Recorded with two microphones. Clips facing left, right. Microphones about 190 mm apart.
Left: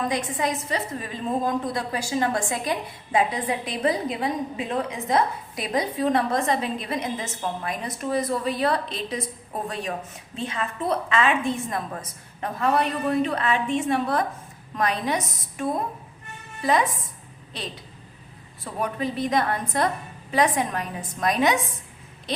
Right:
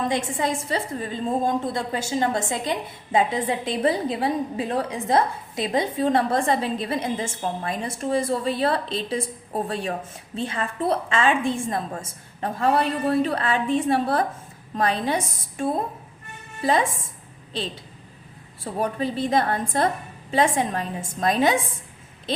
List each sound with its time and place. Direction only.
0.1 s a woman's voice: 25° right (ahead or behind)
18.6 s a woman's voice: 30° right (ahead or behind)